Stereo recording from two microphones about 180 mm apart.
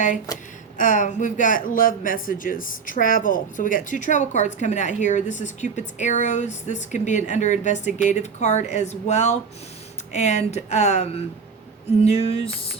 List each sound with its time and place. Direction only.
0.8 s speech: 45° left (ahead or behind)